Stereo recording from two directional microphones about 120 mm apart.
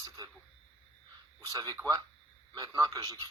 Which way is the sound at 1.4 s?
30° right (ahead or behind).